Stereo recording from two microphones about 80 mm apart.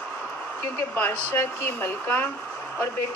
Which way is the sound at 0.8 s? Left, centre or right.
Left.